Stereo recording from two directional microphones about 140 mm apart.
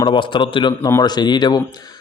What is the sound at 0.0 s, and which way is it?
Speech, 35° left (ahead or behind).